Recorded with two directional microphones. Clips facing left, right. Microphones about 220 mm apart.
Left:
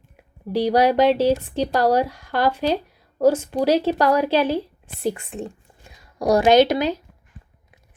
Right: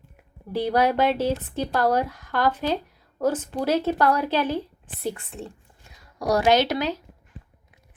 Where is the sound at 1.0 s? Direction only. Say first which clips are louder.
Left 5 dB; 15° left (ahead or behind).